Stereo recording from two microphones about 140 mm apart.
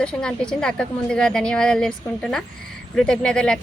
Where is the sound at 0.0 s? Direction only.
5° left (ahead or behind).